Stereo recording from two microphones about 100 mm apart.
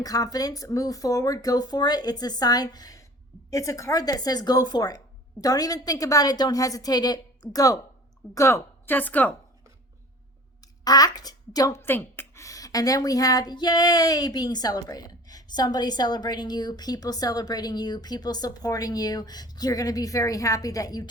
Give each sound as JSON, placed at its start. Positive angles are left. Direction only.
{"t": 0.0, "sound": "a woman's voice", "side_deg": 40}
{"t": 10.6, "sound": "speech", "side_deg": 40}
{"t": 11.7, "sound": "a woman's voice", "side_deg": 25}